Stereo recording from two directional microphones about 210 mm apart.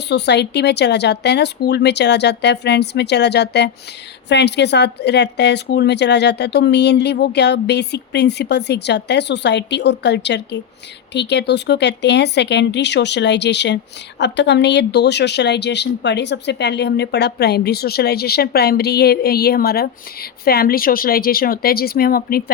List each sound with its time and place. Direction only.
0.1 s a woman's voice: 55° left (ahead or behind)